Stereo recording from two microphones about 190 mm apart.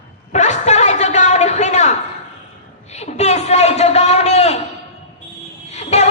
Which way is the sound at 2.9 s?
35° left (ahead or behind).